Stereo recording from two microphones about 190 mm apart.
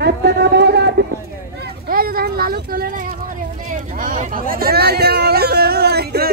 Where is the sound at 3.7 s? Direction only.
45° right (ahead or behind).